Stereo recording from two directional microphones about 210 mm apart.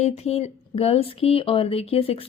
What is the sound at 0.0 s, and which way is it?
Speech, 30° left (ahead or behind).